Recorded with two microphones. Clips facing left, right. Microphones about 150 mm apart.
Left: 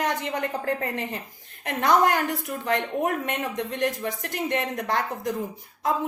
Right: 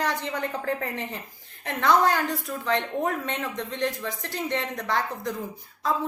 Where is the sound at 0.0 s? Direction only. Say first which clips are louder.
Left 1 dB; 20° left (ahead or behind).